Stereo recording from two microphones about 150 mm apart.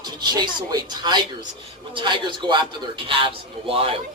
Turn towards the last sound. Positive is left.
turn(degrees=-40)  # may be behind; listen again after turning